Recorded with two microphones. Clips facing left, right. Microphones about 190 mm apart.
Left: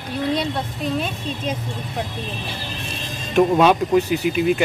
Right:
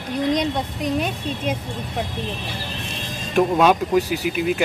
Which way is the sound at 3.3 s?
5° right (ahead or behind).